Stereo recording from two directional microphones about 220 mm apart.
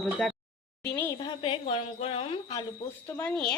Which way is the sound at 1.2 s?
20° left (ahead or behind).